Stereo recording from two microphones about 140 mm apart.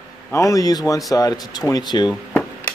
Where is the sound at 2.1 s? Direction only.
5° left (ahead or behind).